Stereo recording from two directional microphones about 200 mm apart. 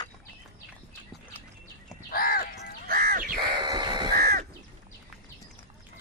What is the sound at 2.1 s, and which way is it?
Crow, 45° left (ahead or behind).